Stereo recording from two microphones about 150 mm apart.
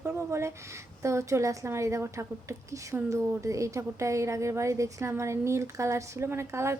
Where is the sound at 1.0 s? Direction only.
20° right (ahead or behind).